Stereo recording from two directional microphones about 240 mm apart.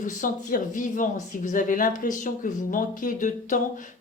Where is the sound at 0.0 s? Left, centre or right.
Left.